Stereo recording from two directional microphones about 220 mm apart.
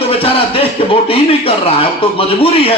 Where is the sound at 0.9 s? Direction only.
25° left (ahead or behind).